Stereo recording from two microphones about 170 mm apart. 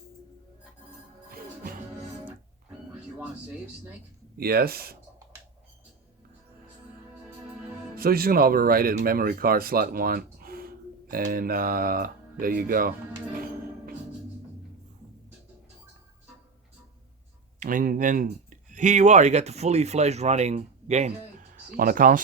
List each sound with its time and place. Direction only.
1.3 s music: 60° right (ahead or behind)
4.4 s speech: 65° right (ahead or behind)
7.9 s speech: 60° right (ahead or behind)
17.6 s speech: 50° right (ahead or behind)
21.7 s speech: 55° right (ahead or behind)